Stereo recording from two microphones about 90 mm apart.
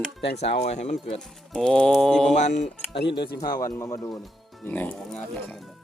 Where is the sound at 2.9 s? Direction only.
70° left (ahead or behind).